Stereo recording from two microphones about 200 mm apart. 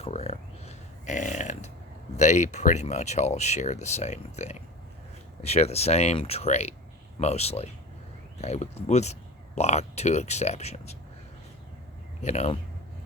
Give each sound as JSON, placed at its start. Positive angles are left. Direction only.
{"t": 0.0, "sound": "a sound", "side_deg": 30}
{"t": 2.1, "sound": "speech", "side_deg": 35}
{"t": 12.2, "sound": "speech", "side_deg": 35}